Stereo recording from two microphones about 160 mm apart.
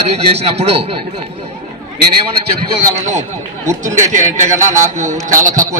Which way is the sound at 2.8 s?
50° right (ahead or behind).